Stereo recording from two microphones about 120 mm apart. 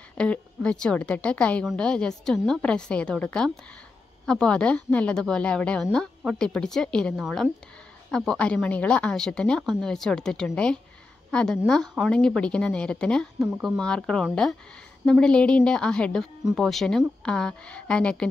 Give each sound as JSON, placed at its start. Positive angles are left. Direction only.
{"t": 0.2, "sound": "a woman's voice", "side_deg": 10}